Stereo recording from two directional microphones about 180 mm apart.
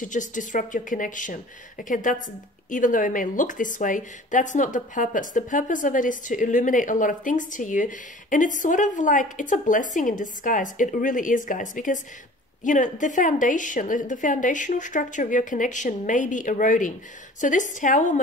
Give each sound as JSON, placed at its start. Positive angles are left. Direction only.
{"t": 0.0, "sound": "a woman's voice", "side_deg": 45}